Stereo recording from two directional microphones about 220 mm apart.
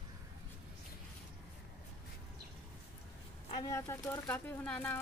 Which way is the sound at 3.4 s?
20° left (ahead or behind).